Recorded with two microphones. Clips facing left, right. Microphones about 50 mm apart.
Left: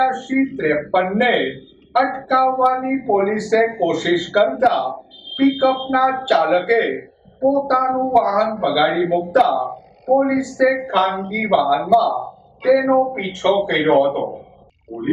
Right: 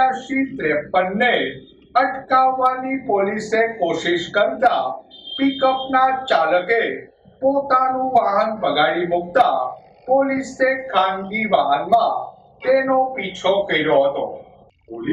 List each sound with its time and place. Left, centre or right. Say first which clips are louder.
0.3 s speech: left 2 dB; centre
4.6 s a sound: even; centre
5.6 s speech: even; centre
14.9 s speech: left 1 dB; right